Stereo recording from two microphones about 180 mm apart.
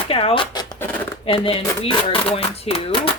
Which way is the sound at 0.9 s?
10° left (ahead or behind).